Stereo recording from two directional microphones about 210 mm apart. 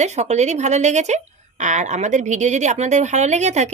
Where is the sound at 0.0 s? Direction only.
35° right (ahead or behind).